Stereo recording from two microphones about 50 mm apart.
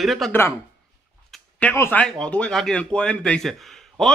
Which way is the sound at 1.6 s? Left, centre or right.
Left.